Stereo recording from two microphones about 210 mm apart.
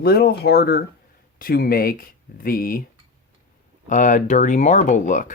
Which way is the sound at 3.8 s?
35° left (ahead or behind).